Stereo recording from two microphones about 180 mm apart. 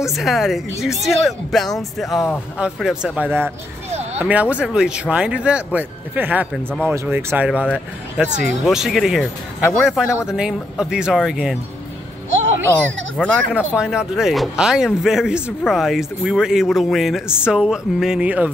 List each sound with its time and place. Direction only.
0.0 s speech: centre (ahead or behind)
3.9 s a sound: 35° right (ahead or behind)
4.2 s speech: 10° right (ahead or behind)
13.3 s speech: 5° right (ahead or behind)